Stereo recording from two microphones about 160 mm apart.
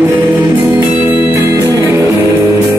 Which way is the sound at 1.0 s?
30° left (ahead or behind).